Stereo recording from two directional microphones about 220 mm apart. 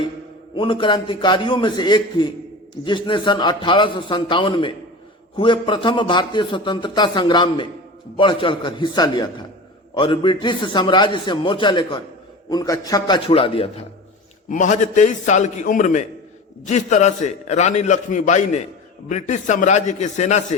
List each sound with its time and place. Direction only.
0.5 s a man's voice: 20° left (ahead or behind)